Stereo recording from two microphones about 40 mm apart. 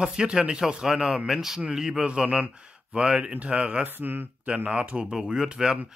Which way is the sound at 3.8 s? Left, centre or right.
Right.